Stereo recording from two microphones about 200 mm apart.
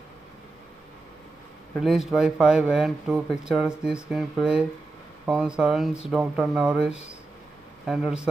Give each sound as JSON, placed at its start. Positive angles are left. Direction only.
{"t": 1.8, "sound": "speech", "side_deg": 0}